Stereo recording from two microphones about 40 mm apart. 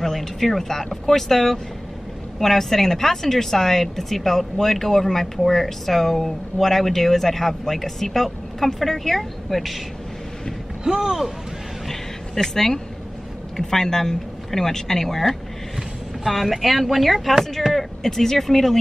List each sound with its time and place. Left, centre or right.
0.0 s speech: centre
10.8 s speech: centre
11.9 s a sound: centre
13.6 s speech: centre